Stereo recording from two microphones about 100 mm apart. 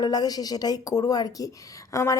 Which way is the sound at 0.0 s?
40° left (ahead or behind).